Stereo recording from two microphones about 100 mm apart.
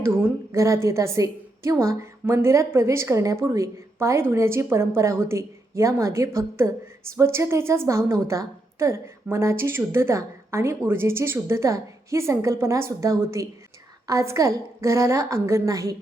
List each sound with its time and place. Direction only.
0.0 s a woman's voice: 25° right (ahead or behind)